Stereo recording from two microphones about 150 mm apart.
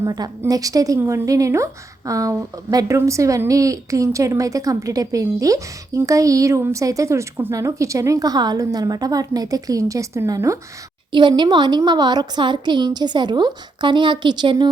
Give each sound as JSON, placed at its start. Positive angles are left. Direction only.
{"t": 0.0, "sound": "a woman's voice", "side_deg": -25}
{"t": 11.1, "sound": "a woman's voice", "side_deg": -30}